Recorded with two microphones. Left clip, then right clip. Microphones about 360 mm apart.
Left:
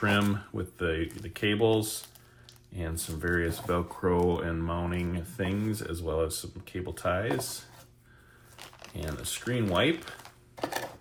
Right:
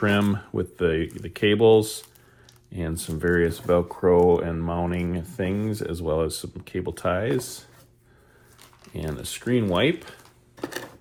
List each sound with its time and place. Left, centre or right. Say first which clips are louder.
0.0 s speech: right 4 dB; centre
3.0 s speech: right 8 dB; centre
9.0 s speech: right 4 dB; centre